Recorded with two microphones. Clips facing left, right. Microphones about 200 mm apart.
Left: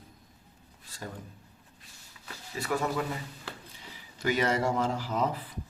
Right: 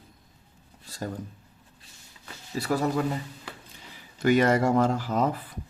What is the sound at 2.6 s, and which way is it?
Speech, 35° right (ahead or behind).